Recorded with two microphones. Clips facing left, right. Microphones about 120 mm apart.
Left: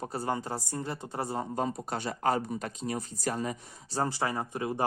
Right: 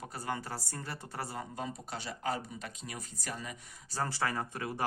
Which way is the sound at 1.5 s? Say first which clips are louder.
Left 8 dB; 45° left (ahead or behind).